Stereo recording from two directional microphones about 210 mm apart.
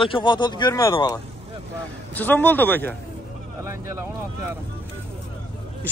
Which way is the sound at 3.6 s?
10° right (ahead or behind).